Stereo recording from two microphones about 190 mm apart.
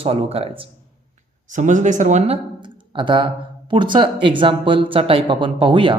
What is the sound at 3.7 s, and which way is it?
Speech, 25° right (ahead or behind).